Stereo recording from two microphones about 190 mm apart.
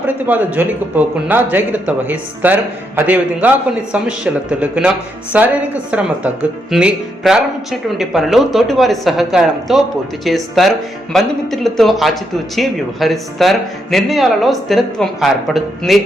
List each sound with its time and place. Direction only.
0.3 s a man's voice: 10° right (ahead or behind)